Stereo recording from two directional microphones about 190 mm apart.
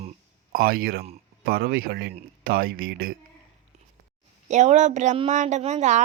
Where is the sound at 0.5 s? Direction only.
50° right (ahead or behind).